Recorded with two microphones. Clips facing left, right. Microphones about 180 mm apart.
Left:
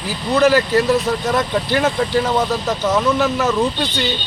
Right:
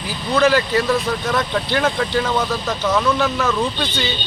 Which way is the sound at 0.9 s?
20° left (ahead or behind).